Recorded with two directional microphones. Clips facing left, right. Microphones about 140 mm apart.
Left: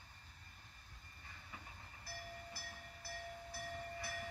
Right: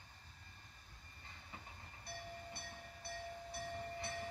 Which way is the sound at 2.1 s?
25° right (ahead or behind).